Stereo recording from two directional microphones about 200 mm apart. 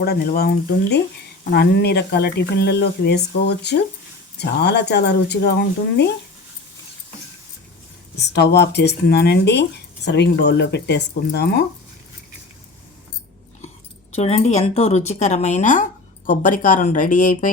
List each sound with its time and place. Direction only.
0.0 s speech: 50° left (ahead or behind)
8.3 s speech: 55° left (ahead or behind)
14.1 s speech: 30° left (ahead or behind)